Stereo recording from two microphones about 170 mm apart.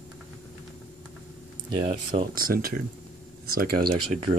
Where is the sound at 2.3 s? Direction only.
60° right (ahead or behind).